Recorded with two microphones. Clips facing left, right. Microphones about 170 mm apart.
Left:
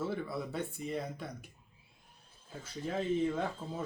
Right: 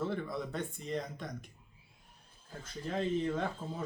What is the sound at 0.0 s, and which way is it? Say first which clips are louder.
Speech: even; 5° left (ahead or behind).